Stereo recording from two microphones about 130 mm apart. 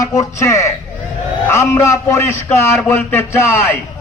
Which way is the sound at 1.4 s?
20° left (ahead or behind).